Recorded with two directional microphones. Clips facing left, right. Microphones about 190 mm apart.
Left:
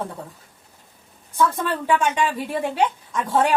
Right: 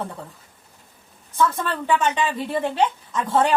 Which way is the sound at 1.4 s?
10° left (ahead or behind).